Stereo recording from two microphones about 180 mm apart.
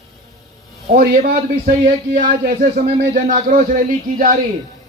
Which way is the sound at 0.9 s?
50° right (ahead or behind).